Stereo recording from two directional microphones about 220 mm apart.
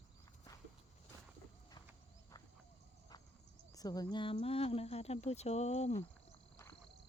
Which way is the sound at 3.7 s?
15° left (ahead or behind).